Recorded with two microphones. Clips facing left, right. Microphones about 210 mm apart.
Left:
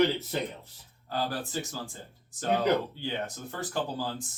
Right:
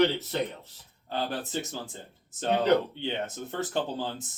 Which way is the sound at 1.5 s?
20° right (ahead or behind).